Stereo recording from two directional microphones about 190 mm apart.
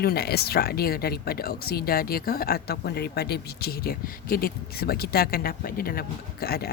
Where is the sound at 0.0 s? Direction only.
55° left (ahead or behind).